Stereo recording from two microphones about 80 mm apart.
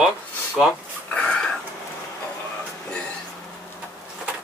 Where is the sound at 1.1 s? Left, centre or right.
Centre.